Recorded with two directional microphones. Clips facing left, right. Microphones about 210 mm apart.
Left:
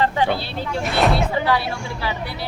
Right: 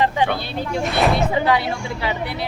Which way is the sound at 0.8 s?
Centre (ahead or behind).